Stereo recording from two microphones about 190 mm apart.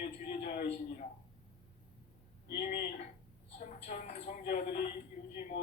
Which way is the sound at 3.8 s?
40° left (ahead or behind).